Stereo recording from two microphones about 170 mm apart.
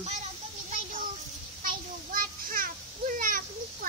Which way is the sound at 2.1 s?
55° right (ahead or behind).